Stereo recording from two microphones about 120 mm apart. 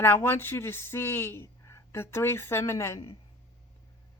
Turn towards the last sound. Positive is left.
turn(degrees=25)  # may be behind; listen again after turning